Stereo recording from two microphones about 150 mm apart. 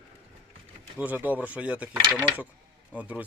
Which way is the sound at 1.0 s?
10° right (ahead or behind).